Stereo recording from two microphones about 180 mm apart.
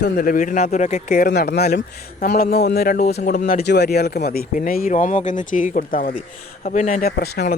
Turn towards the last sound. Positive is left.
turn(degrees=60)  # may be behind; listen again after turning